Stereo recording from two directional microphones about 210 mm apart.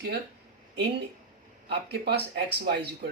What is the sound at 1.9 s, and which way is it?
Speech, 50° right (ahead or behind).